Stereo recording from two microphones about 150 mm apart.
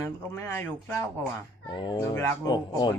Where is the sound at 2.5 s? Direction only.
30° left (ahead or behind).